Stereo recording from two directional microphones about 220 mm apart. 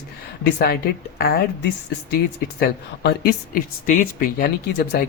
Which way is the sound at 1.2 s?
45° left (ahead or behind).